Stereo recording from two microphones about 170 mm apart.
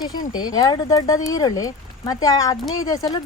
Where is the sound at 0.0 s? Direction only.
25° left (ahead or behind).